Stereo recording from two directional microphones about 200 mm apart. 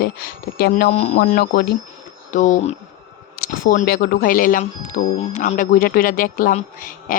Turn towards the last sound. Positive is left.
turn(degrees=45)  # may be behind; listen again after turning